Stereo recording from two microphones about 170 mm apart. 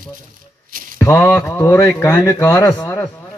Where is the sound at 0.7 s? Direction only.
55° right (ahead or behind).